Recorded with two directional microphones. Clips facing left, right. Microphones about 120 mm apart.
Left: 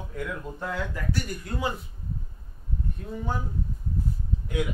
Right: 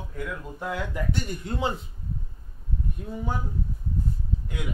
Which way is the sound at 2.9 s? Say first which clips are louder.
Right 1 dB; 10° right (ahead or behind).